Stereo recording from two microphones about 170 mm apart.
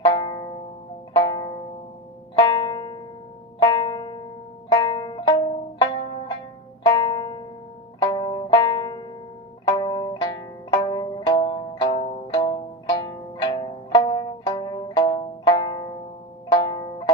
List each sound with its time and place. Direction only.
0.0 s music: 25° left (ahead or behind)
1.1 s zither: 25° left (ahead or behind)
2.4 s music: 25° left (ahead or behind)
5.8 s zither: 30° left (ahead or behind)
6.8 s music: 25° left (ahead or behind)
11.9 s zither: 40° left (ahead or behind); by 15.9 s 25° left (ahead or behind)
16.5 s music: 25° left (ahead or behind)